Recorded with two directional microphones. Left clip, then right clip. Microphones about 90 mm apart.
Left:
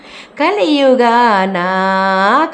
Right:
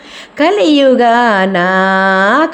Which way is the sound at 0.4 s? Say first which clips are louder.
Right 2 dB; 25° right (ahead or behind).